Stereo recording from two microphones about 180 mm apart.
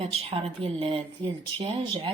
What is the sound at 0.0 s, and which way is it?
Speech, 35° right (ahead or behind).